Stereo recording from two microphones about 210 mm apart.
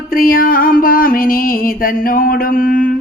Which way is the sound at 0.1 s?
45° left (ahead or behind).